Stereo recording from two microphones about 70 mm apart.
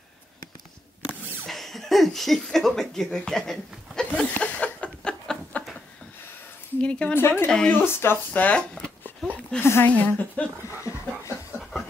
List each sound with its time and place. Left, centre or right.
1.5 s speech: centre
4.0 s a sound: centre
6.8 s speech: centre
7.2 s speech: left
7.4 s speech: centre
7.7 s speech: left
8.3 s speech: centre
9.6 s speech: left
9.8 s speech: left
10.8 s a sound: left